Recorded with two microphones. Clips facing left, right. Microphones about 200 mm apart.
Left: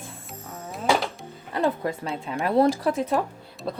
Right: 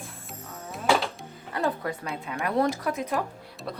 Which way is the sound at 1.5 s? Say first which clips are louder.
Left 4 dB; 25° left (ahead or behind).